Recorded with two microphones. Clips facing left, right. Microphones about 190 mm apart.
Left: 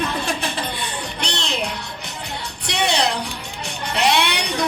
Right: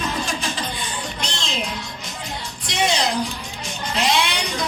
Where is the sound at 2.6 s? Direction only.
65° left (ahead or behind).